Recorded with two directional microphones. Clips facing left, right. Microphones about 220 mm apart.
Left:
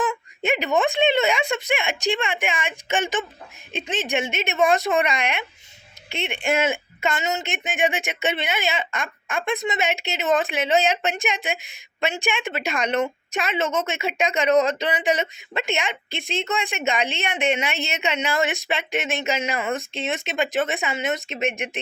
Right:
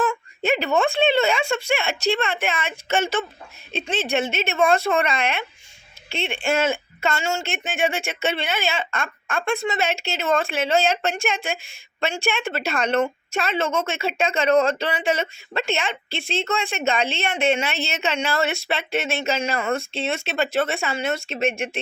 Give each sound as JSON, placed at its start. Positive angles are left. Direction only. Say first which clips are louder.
{"t": 0.0, "sound": "speech", "louder": "right 2 dB", "side_deg": 15}